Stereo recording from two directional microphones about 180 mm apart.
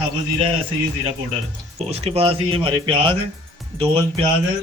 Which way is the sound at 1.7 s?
35° right (ahead or behind).